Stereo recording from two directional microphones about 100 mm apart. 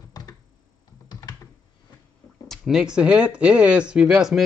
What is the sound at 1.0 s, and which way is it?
Computer keyboard, 40° left (ahead or behind).